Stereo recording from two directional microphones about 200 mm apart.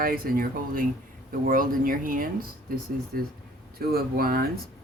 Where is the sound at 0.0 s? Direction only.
45° right (ahead or behind).